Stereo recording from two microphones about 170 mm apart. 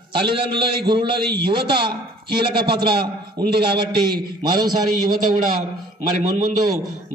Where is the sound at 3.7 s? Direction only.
25° right (ahead or behind).